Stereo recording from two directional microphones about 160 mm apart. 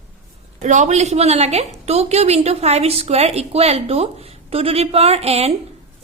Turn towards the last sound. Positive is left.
turn(degrees=-40)  # may be behind; listen again after turning